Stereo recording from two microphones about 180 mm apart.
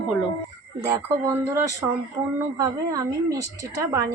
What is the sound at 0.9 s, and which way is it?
A woman's voice, 20° right (ahead or behind).